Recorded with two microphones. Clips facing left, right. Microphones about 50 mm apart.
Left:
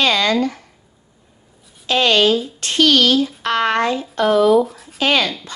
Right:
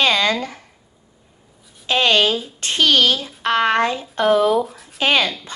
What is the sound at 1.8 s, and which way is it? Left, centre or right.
Speech, right.